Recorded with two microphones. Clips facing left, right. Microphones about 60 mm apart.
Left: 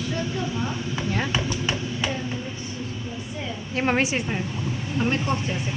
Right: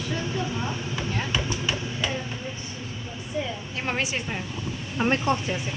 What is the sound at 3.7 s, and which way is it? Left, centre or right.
Speech, left.